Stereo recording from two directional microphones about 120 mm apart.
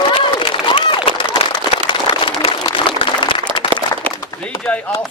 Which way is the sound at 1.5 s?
45° left (ahead or behind).